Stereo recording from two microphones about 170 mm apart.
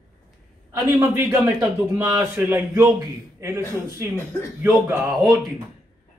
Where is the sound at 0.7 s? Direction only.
15° right (ahead or behind).